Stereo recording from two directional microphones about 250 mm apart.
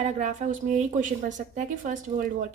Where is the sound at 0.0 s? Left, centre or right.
Right.